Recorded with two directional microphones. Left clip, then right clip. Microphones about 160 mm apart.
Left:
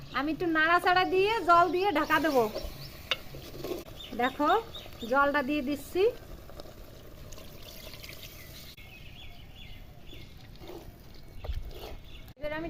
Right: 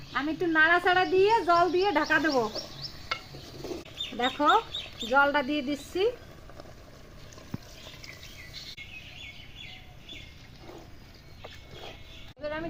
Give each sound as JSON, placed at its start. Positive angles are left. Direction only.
{"t": 0.1, "sound": "speech", "side_deg": 30}
{"t": 4.2, "sound": "speech", "side_deg": 25}
{"t": 12.4, "sound": "a sound", "side_deg": 20}